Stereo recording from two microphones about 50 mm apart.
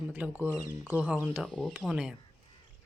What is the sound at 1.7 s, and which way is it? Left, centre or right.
Speech, centre.